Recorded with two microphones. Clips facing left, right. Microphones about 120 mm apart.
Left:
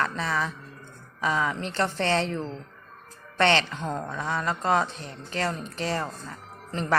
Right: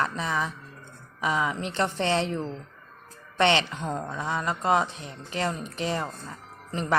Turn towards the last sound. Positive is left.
turn(degrees=-15)  # may be behind; listen again after turning